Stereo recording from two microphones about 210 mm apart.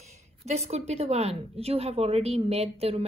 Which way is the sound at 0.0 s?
30° right (ahead or behind).